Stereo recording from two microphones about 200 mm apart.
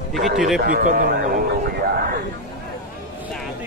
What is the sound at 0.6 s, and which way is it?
Speech, 45° right (ahead or behind).